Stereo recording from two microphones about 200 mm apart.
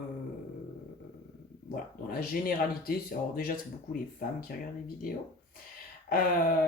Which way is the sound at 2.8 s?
45° left (ahead or behind).